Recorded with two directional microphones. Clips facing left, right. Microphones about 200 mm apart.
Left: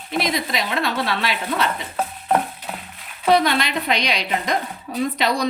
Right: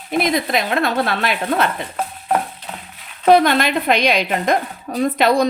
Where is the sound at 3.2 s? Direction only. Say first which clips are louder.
Right 5 dB; 50° right (ahead or behind).